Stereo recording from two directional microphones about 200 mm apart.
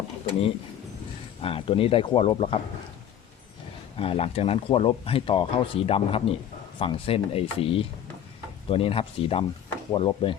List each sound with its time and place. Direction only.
1.4 s speech: 30° left (ahead or behind)
3.9 s speech: 30° left (ahead or behind)